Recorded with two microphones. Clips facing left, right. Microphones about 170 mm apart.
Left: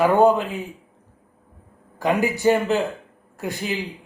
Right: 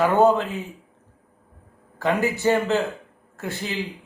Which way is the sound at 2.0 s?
15° left (ahead or behind).